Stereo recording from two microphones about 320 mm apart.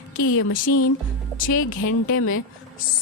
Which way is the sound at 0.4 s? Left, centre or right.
Left.